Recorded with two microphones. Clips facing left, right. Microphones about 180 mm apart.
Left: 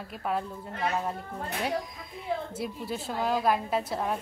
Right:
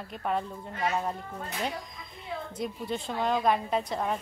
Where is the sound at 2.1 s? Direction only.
5° left (ahead or behind).